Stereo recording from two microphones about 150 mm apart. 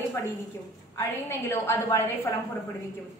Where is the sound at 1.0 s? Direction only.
15° left (ahead or behind).